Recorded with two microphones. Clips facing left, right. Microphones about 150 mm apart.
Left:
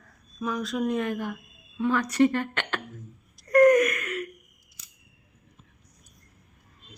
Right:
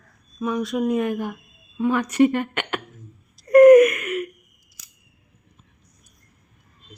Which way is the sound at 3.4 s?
25° right (ahead or behind).